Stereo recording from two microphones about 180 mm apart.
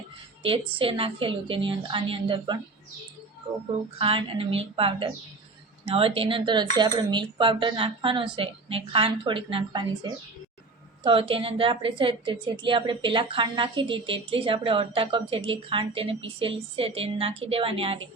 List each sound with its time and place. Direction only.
0.4 s a woman's voice: 30° right (ahead or behind)
3.9 s a woman's voice: 30° right (ahead or behind)